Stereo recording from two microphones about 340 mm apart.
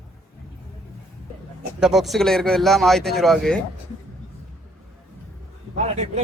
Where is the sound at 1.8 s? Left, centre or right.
Centre.